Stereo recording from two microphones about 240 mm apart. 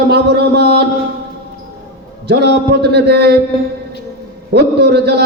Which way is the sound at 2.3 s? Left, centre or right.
Right.